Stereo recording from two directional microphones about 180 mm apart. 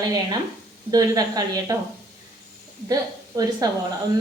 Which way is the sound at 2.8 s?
20° right (ahead or behind).